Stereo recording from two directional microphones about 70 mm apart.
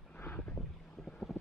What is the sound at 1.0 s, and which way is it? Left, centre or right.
Vehicle, centre.